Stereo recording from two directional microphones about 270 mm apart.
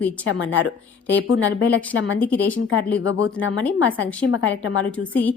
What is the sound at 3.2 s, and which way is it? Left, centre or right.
A woman's voice, left.